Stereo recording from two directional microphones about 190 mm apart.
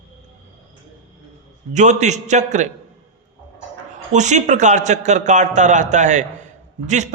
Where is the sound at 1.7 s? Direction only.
40° right (ahead or behind).